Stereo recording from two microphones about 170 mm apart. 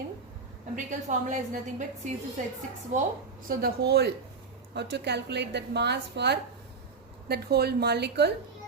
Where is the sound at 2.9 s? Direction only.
45° right (ahead or behind).